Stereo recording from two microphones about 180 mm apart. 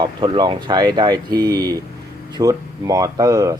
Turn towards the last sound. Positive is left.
turn(degrees=-20)  # may be behind; listen again after turning